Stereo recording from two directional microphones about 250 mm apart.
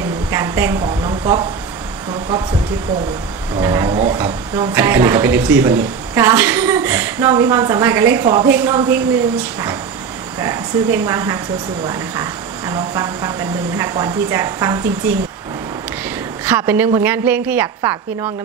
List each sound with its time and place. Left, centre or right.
0.3 s speech: centre
3.5 s speech: centre
16.4 s speech: centre